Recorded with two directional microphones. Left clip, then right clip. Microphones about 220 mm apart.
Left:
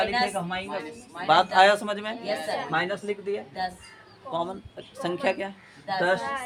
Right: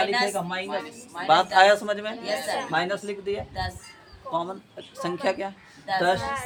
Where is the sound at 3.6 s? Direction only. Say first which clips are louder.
Left 1 dB; 25° right (ahead or behind).